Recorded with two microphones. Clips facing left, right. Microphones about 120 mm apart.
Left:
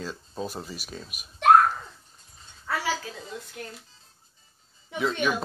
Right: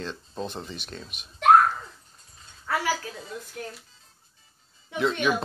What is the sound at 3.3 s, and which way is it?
Speech, 25° left (ahead or behind).